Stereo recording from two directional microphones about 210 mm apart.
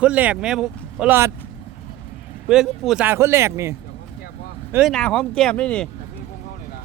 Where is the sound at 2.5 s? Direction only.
5° right (ahead or behind).